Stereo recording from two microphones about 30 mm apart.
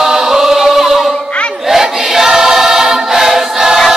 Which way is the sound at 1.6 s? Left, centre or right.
Centre.